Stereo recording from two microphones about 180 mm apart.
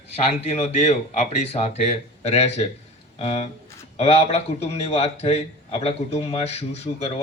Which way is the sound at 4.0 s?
35° left (ahead or behind).